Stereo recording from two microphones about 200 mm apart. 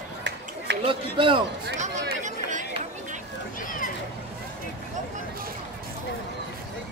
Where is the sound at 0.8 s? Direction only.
25° right (ahead or behind).